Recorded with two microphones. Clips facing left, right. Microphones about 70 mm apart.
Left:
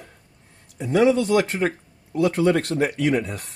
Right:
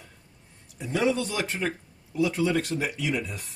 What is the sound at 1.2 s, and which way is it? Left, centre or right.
Speech, left.